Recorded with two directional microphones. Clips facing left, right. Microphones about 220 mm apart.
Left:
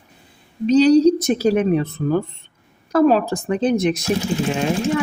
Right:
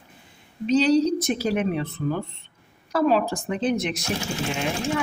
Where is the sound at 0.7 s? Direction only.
40° left (ahead or behind).